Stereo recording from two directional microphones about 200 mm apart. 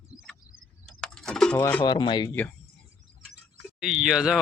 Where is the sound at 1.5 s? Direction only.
20° left (ahead or behind).